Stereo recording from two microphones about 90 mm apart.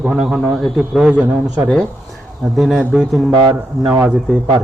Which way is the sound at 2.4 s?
Centre (ahead or behind).